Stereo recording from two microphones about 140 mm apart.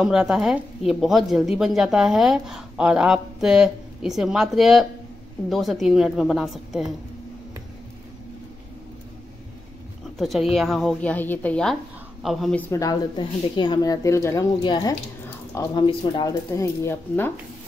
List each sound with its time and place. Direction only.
0.0 s a woman's voice: 5° right (ahead or behind)
10.1 s a woman's voice: centre (ahead or behind)
12.5 s speech: 15° left (ahead or behind)
12.8 s speech: 30° left (ahead or behind)
16.3 s speech: 20° left (ahead or behind)